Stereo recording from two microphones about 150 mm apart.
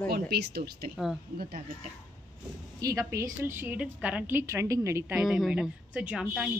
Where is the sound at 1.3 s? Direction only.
75° right (ahead or behind).